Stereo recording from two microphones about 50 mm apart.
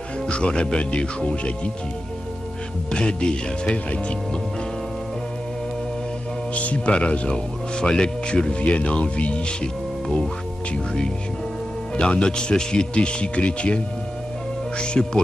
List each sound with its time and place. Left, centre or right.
0.3 s speech: centre
2.9 s speech: centre
6.5 s speech: left
10.0 s speech: centre
12.0 s speech: centre
15.0 s speech: centre